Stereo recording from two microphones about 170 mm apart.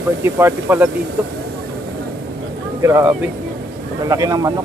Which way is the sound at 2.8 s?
15° right (ahead or behind).